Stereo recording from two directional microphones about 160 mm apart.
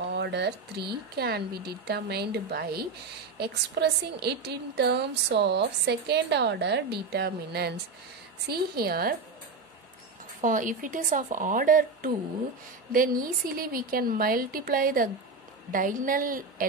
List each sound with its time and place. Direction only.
0.1 s a woman's voice: 90° right
3.3 s a woman's voice: 90° right; by 9.1 s 70° right (ahead or behind)
10.4 s a woman's voice: 55° right (ahead or behind)